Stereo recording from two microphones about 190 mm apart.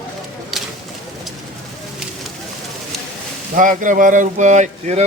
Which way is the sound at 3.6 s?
45° right (ahead or behind).